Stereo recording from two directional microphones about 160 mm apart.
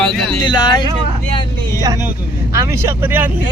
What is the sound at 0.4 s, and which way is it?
Speech, 30° left (ahead or behind).